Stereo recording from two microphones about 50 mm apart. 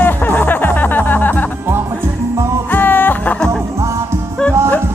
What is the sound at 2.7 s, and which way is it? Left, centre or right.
Music, left.